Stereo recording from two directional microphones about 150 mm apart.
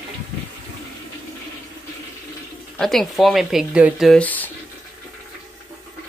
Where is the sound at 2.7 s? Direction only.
Centre (ahead or behind).